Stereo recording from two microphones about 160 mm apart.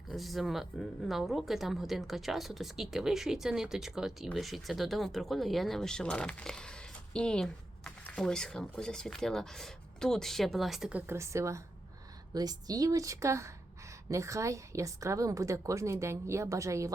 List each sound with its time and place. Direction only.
0.1 s a woman's voice: centre (ahead or behind); by 16.9 s 20° right (ahead or behind)